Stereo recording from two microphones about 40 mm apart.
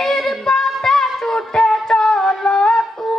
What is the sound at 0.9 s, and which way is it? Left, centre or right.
Music, centre.